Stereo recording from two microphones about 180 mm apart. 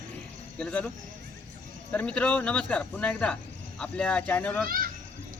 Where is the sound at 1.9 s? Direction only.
5° left (ahead or behind).